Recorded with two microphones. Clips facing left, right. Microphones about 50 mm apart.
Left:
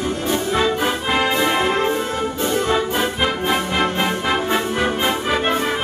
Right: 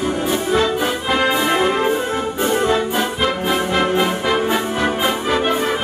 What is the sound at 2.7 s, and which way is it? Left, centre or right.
Music, centre.